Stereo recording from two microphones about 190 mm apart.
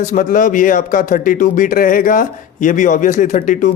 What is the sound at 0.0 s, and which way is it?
A man's voice, 45° left (ahead or behind).